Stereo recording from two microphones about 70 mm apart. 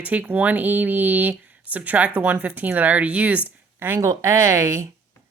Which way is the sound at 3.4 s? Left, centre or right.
Right.